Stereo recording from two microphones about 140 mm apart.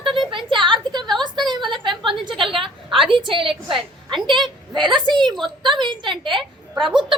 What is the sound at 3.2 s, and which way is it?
A woman's voice, 35° right (ahead or behind).